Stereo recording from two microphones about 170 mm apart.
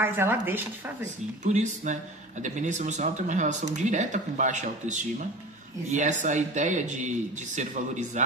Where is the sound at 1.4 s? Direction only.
45° right (ahead or behind).